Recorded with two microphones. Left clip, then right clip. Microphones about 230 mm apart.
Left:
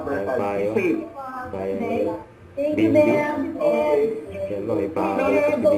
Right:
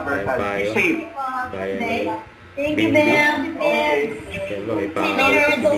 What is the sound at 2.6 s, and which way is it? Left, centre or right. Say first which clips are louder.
A man's voice: right 1 dB; centre.